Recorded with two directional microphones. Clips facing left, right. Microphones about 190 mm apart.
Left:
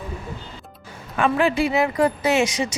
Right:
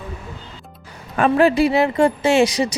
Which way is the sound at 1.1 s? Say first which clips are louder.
Right 5 dB; 40° right (ahead or behind).